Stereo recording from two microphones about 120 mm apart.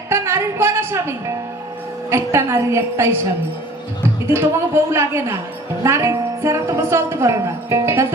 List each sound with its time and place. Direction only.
0.1 s music: 20° right (ahead or behind)
2.0 s a woman's voice: 25° right (ahead or behind)
4.3 s a woman's voice: 20° right (ahead or behind)